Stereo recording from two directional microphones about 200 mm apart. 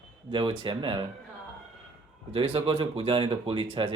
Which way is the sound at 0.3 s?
25° right (ahead or behind).